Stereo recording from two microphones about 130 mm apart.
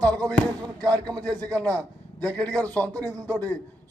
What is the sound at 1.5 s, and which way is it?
Speech, 10° left (ahead or behind).